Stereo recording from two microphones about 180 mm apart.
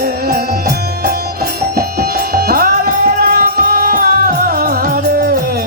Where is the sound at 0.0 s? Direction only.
60° right (ahead or behind).